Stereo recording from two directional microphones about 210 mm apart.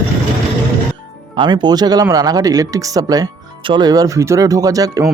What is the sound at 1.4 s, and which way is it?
Speech, 20° right (ahead or behind).